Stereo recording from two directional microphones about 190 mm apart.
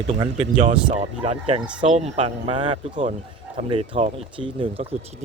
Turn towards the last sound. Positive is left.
turn(degrees=-30)  # may be behind; listen again after turning